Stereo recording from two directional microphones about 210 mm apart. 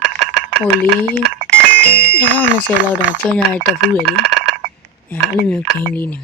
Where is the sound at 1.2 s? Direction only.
60° right (ahead or behind).